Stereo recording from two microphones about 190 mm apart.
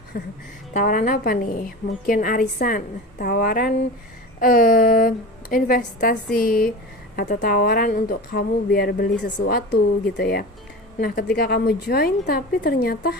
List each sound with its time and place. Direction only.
0.1 s speech: 55° left (ahead or behind)